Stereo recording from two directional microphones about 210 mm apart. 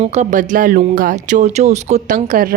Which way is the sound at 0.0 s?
30° right (ahead or behind).